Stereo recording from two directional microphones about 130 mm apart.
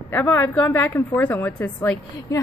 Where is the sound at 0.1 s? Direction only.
15° left (ahead or behind).